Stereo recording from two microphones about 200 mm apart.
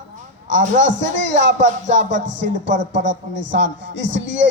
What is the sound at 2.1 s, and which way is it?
Speech, 65° right (ahead or behind).